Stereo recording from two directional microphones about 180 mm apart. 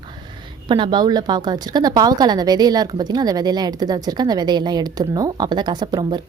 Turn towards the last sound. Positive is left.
turn(degrees=-25)  # may be behind; listen again after turning